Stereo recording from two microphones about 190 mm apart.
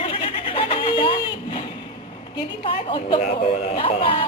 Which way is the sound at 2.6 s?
25° left (ahead or behind).